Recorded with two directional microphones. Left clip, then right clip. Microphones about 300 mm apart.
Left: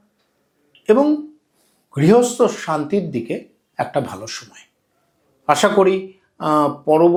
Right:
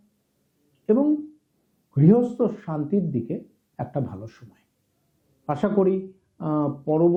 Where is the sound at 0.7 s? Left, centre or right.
Centre.